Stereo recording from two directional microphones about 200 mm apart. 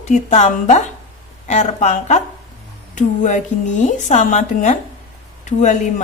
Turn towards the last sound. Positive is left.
turn(degrees=35)  # may be behind; listen again after turning